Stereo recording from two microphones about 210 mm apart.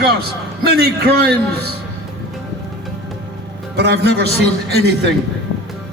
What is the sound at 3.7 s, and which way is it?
Speech, 50° right (ahead or behind).